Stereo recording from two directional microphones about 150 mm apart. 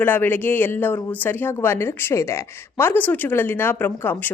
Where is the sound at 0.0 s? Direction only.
15° left (ahead or behind).